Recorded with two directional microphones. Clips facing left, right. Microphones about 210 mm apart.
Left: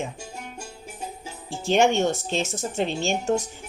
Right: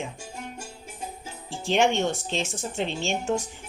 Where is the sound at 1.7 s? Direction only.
45° left (ahead or behind).